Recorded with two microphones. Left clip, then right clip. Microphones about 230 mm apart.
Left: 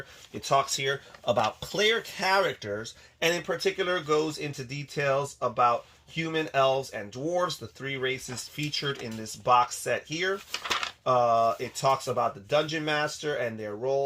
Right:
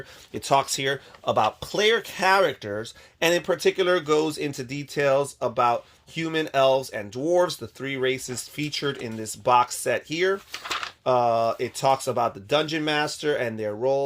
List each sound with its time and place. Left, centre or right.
0.3 s speech: right